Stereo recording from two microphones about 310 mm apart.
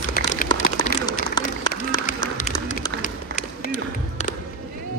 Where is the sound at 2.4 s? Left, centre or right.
Left.